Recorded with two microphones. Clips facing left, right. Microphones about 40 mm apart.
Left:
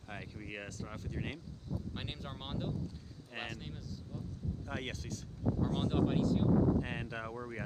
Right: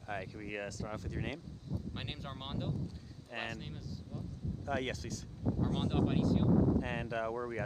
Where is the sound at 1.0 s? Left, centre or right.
Centre.